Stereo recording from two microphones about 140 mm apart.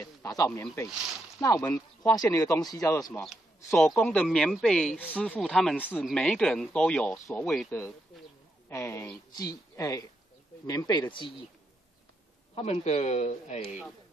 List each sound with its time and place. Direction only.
1.4 s speech: 20° left (ahead or behind)
3.2 s speech: centre (ahead or behind)
8.6 s speech: 15° left (ahead or behind); by 11.3 s 35° left (ahead or behind)
12.5 s a man's voice: 45° left (ahead or behind)